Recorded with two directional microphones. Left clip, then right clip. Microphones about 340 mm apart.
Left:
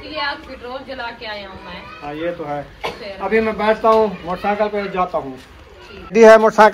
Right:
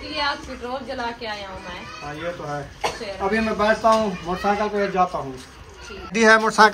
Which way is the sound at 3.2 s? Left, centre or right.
Centre.